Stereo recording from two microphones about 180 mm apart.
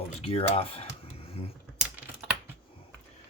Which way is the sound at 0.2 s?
35° left (ahead or behind).